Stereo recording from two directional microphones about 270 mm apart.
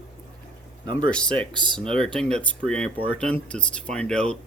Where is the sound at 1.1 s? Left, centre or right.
Centre.